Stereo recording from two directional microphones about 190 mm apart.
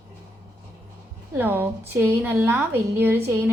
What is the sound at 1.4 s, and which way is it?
A woman's voice, 10° right (ahead or behind).